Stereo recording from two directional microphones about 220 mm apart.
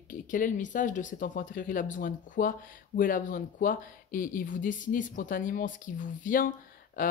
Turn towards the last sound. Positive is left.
turn(degrees=40)  # may be behind; listen again after turning